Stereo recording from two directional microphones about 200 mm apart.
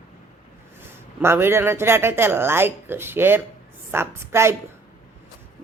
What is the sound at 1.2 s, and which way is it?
Speech, 10° right (ahead or behind).